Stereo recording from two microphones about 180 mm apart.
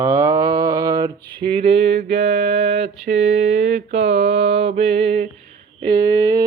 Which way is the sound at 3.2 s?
40° right (ahead or behind).